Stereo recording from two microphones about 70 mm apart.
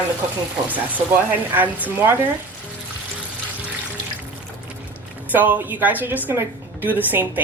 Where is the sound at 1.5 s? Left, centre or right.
Right.